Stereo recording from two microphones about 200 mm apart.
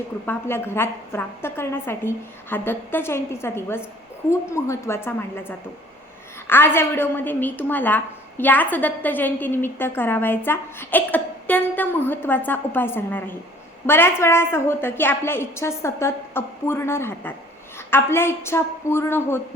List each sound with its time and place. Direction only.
0.3 s a woman's voice: 10° left (ahead or behind)